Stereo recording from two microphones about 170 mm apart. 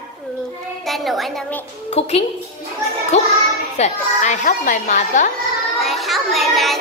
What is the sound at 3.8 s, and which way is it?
Speech, 45° left (ahead or behind).